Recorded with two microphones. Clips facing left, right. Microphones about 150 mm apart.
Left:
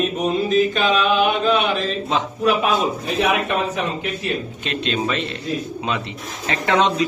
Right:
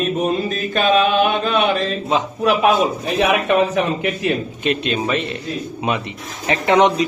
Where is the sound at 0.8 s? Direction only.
50° right (ahead or behind).